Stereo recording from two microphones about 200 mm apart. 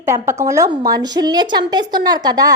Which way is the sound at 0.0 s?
15° right (ahead or behind).